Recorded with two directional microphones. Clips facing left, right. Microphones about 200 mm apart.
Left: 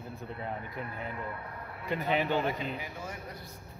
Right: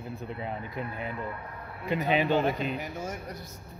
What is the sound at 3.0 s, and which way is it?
Speech, 40° right (ahead or behind).